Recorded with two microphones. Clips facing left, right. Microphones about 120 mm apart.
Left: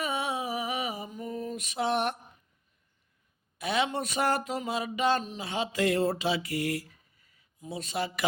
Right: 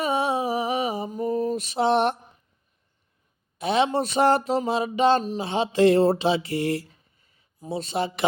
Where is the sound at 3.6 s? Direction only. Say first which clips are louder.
Right 7 dB; 25° right (ahead or behind).